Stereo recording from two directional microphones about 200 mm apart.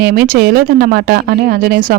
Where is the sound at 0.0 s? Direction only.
50° right (ahead or behind).